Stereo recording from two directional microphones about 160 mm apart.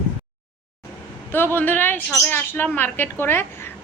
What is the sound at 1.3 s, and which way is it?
Speech, 15° left (ahead or behind).